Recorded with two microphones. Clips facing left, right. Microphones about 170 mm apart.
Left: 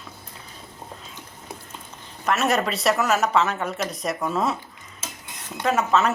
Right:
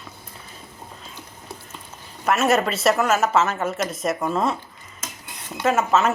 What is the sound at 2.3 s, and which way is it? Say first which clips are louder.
A woman's voice: right 3 dB; 5° right (ahead or behind).